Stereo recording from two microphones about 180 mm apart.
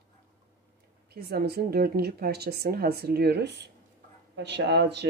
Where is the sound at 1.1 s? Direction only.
60° right (ahead or behind).